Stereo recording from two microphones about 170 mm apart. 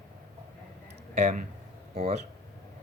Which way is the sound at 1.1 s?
40° right (ahead or behind).